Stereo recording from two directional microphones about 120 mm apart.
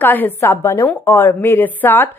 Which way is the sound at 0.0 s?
15° left (ahead or behind).